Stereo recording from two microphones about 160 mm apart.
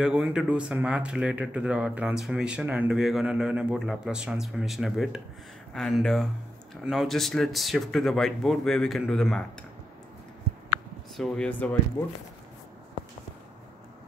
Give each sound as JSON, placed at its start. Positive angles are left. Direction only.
{"t": 0.0, "sound": "speech", "side_deg": -5}
{"t": 11.1, "sound": "speech", "side_deg": 5}